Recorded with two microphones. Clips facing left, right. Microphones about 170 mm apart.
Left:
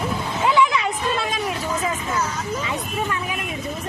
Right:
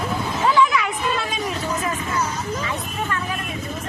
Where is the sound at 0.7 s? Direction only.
25° left (ahead or behind).